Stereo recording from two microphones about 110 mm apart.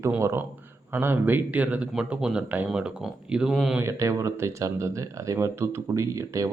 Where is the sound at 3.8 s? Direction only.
25° right (ahead or behind).